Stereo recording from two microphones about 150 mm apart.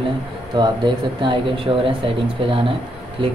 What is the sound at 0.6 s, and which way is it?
Speech, 30° right (ahead or behind).